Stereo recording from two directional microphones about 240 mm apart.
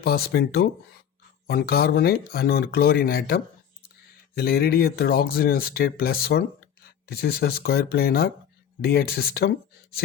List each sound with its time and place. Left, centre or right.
0.0 s speech: left